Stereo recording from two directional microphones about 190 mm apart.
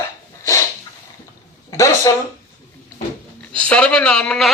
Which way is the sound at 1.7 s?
15° left (ahead or behind).